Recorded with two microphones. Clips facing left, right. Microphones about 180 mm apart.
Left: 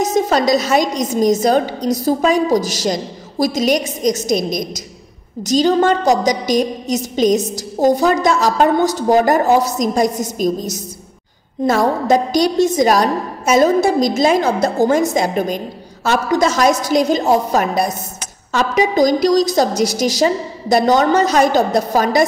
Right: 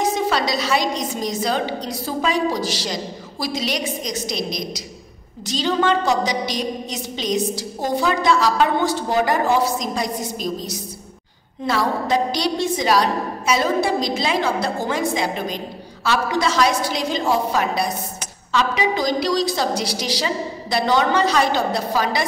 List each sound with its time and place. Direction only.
0.0 s a woman's voice: 45° left (ahead or behind)